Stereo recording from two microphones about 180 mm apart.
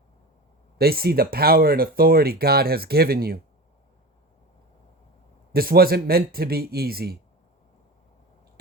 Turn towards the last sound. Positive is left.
turn(degrees=-60)  # may be behind; listen again after turning